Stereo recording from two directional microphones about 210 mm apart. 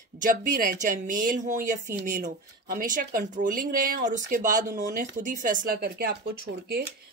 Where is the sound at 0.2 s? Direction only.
40° right (ahead or behind).